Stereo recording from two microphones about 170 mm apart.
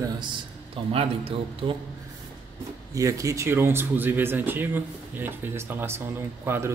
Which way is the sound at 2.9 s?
20° right (ahead or behind).